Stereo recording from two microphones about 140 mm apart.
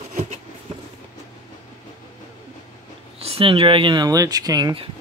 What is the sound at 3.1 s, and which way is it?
Speech, 45° right (ahead or behind).